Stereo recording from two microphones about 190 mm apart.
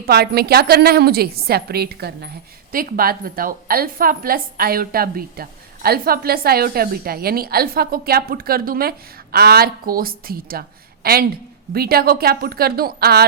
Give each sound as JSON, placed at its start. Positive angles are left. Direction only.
{"t": 0.0, "sound": "a woman's voice", "side_deg": -55}